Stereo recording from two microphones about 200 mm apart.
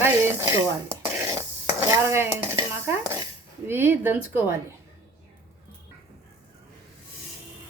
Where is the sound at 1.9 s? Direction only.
10° right (ahead or behind).